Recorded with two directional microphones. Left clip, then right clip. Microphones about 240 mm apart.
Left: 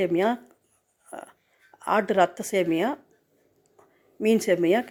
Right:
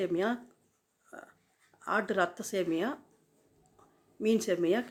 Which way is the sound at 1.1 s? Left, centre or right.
Left.